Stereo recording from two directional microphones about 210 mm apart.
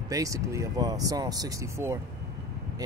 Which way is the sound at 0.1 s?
15° right (ahead or behind).